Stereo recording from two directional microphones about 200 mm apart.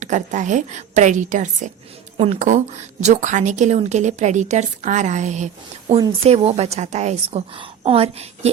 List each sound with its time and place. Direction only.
0.0 s a woman's voice: 40° right (ahead or behind)